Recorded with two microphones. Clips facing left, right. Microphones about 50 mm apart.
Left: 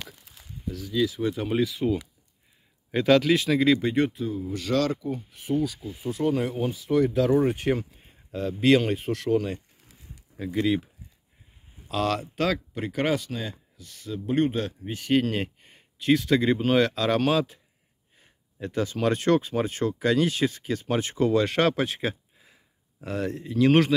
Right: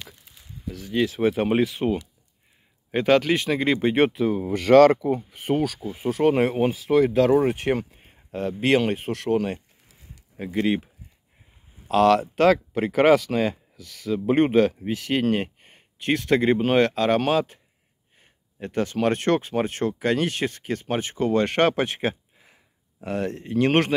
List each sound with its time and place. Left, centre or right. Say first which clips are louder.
0.7 s speech: right 2 dB; right
1.8 s speech: right 2 dB; right
3.9 s speech: right 5 dB; right
7.6 s speech: right 2 dB; right
10.4 s speech: right 1 dB; right
11.9 s speech: right 9 dB; right
13.3 s speech: right 10 dB; right
14.0 s speech: right 5 dB; right
14.9 s speech: right 1 dB; right
15.2 s a sound: right 5 dB; right
16.0 s speech: even; right
18.2 s speech: even; right
21.3 s speech: right 3 dB; right